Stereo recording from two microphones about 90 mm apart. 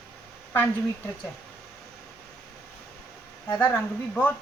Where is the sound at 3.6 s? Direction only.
25° left (ahead or behind).